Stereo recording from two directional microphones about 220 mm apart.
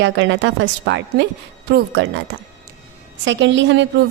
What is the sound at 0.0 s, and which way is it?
A woman's voice, 55° right (ahead or behind).